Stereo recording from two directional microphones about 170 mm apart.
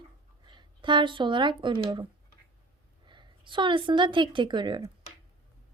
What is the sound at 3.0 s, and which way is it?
A woman's voice, 30° right (ahead or behind).